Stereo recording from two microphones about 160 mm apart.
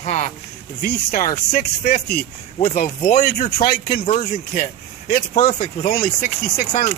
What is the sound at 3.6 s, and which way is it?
Speech, 70° left (ahead or behind).